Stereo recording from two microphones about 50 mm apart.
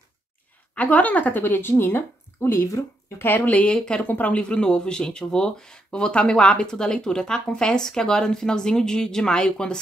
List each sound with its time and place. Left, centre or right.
0.7 s a woman's voice: left
1.4 s speech: left
3.2 s a woman's voice: left
3.6 s speech: centre
4.0 s speech: left; by 9.8 s centre